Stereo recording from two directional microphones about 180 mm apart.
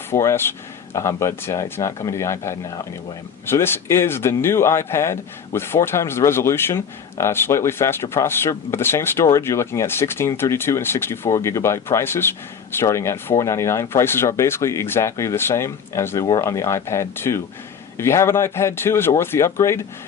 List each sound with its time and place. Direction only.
0.1 s speech: 15° left (ahead or behind)